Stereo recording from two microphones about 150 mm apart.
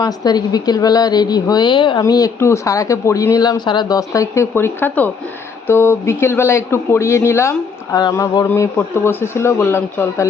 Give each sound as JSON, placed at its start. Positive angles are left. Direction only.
{"t": 0.0, "sound": "a woman's voice", "side_deg": 25}